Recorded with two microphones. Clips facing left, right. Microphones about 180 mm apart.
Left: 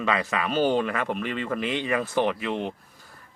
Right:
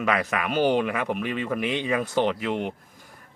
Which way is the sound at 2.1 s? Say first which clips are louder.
Right 1 dB; 20° right (ahead or behind).